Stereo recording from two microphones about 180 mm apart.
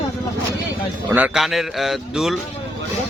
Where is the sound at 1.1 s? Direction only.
5° right (ahead or behind).